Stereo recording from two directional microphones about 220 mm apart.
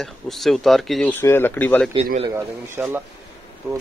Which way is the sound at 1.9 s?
30° right (ahead or behind).